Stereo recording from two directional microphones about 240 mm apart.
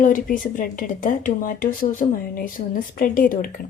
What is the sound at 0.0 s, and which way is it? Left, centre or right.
A woman's voice, left.